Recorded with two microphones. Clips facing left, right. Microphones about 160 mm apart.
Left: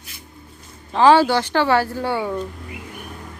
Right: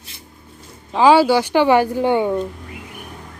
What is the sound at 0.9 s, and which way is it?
Speech, 10° right (ahead or behind).